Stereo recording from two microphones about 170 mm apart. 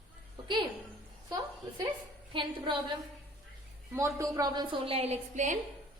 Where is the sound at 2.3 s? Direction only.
30° right (ahead or behind).